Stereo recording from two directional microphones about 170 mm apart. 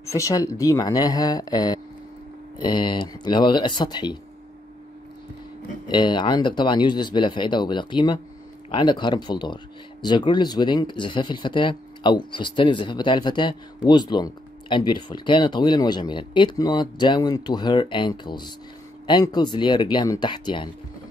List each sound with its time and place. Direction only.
0.0 s speech: 20° left (ahead or behind)
5.9 s speech: 25° left (ahead or behind)